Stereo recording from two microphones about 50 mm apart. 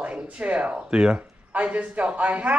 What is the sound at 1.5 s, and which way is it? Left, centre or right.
Speech, right.